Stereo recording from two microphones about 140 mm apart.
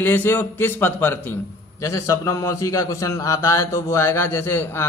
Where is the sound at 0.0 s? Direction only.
15° left (ahead or behind).